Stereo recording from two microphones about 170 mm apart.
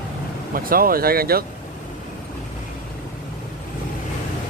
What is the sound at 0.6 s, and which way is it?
Speech, 60° right (ahead or behind).